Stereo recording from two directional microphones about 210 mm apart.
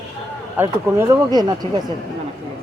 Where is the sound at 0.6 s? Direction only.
10° right (ahead or behind).